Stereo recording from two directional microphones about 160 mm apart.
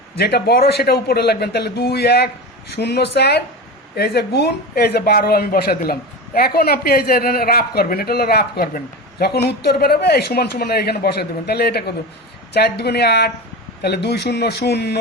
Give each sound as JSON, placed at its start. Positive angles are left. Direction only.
{"t": 0.2, "sound": "a man's voice", "side_deg": 90}